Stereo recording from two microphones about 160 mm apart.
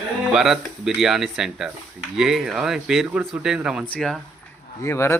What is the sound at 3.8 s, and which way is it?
Speech, 5° left (ahead or behind).